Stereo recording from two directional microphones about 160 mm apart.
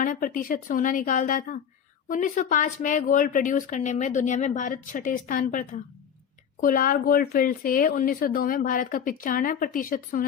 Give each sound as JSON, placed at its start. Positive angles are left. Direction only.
{"t": 0.0, "sound": "speech", "side_deg": 60}